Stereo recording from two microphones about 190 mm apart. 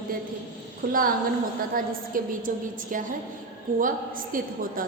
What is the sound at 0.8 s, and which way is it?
A woman's voice, 50° right (ahead or behind).